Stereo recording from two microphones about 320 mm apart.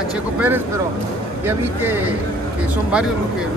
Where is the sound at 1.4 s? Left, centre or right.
Centre.